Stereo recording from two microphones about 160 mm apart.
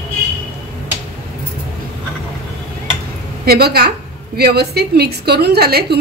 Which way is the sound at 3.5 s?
80° right.